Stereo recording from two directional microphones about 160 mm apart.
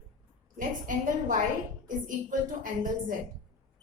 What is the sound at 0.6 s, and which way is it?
A woman's voice, 55° right (ahead or behind).